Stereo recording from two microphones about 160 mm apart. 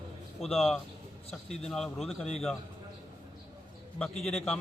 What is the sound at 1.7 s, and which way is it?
Speech, centre (ahead or behind).